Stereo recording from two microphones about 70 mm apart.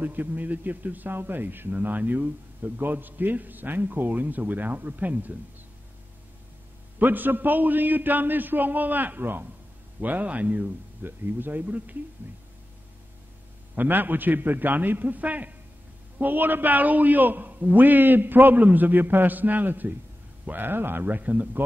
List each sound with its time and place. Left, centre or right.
0.0 s a man's voice: right
7.0 s a man's voice: right
13.7 s a man's voice: right